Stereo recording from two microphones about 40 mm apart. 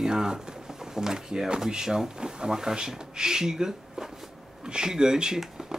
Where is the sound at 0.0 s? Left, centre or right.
Centre.